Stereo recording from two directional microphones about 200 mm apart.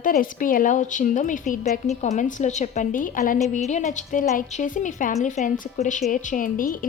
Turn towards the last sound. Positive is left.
turn(degrees=45)  # may be behind; listen again after turning